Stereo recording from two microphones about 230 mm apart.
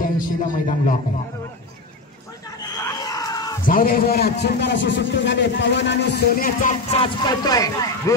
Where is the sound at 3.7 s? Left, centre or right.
Left.